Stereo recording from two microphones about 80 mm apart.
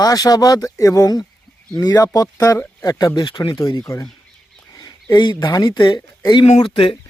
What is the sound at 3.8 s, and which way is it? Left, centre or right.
Speech, left.